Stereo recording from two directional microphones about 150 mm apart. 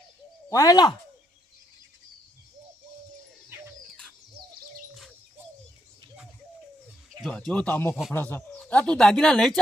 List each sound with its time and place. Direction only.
0.5 s speech: 25° left (ahead or behind)
7.2 s speech: centre (ahead or behind)